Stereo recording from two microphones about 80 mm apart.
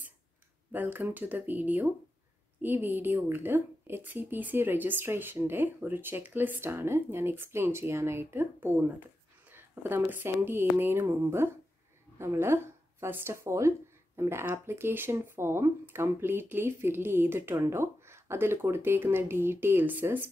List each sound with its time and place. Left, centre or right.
0.7 s a woman's voice: right